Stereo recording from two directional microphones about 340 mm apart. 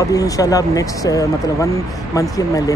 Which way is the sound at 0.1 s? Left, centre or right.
Centre.